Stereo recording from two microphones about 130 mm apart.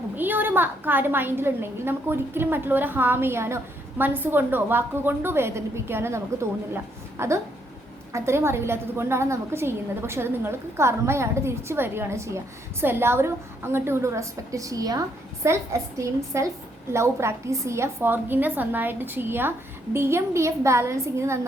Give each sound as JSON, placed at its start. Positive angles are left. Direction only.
{"t": 0.2, "sound": "a woman's voice", "side_deg": -15}